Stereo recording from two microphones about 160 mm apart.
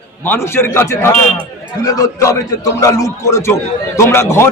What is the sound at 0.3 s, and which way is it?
A man's voice, 15° left (ahead or behind).